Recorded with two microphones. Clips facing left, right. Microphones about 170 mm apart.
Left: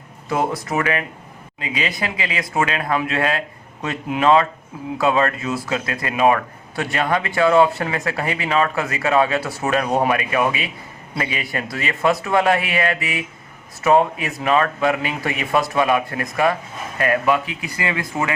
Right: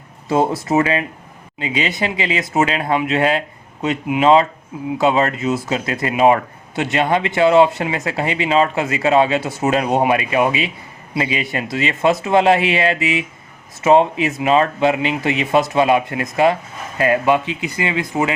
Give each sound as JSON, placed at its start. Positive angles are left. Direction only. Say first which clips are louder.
{"t": 0.3, "sound": "speech", "louder": "right 5 dB", "side_deg": -25}